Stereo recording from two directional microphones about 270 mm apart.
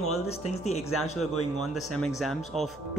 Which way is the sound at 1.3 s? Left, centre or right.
Left.